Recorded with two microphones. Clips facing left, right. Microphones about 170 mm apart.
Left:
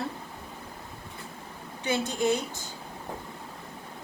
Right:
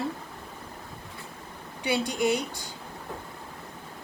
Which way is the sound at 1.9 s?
15° right (ahead or behind).